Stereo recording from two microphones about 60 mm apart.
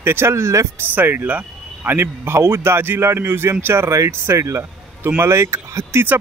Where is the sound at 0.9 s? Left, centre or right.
Right.